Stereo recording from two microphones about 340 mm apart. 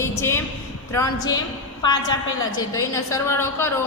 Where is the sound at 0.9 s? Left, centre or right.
Centre.